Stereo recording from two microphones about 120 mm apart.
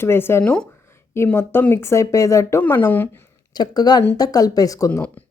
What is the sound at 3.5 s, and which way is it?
Speech, 35° left (ahead or behind).